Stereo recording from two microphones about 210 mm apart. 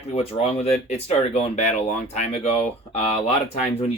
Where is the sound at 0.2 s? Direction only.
30° left (ahead or behind).